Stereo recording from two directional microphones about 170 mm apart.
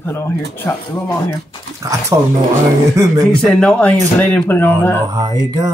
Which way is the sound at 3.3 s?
5° left (ahead or behind).